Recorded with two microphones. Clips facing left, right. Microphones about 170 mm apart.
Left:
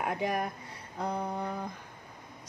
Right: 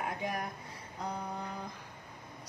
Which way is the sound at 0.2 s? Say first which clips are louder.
Left 6 dB; 60° left (ahead or behind).